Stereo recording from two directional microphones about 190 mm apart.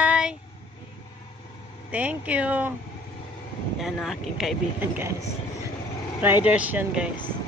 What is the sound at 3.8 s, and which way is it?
Speech, centre (ahead or behind).